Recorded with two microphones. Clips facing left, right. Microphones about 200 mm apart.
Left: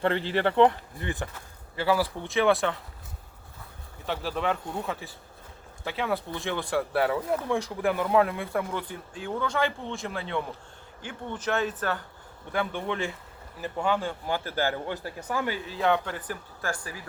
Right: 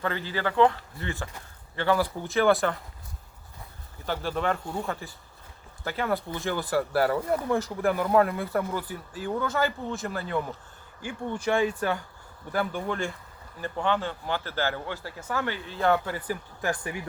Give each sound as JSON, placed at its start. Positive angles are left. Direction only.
{"t": 0.3, "sound": "speech", "side_deg": 25}
{"t": 1.7, "sound": "speech", "side_deg": 5}
{"t": 4.0, "sound": "speech", "side_deg": 0}
{"t": 12.5, "sound": "a man's voice", "side_deg": 0}
{"t": 15.7, "sound": "speech", "side_deg": 0}